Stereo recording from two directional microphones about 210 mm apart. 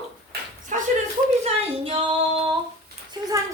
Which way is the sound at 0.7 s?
35° right (ahead or behind).